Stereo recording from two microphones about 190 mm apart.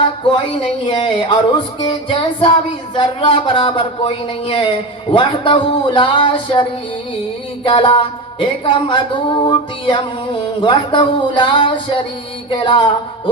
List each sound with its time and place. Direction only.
0.9 s music: 25° left (ahead or behind)